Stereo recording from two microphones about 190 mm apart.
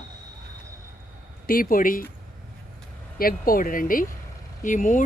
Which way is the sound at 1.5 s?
50° left (ahead or behind).